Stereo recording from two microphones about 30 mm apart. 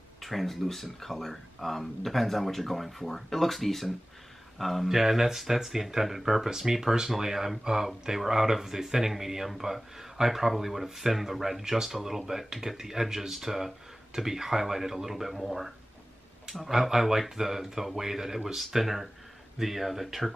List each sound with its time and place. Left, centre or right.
0.2 s speech: centre
4.8 s speech: centre
16.5 s speech: centre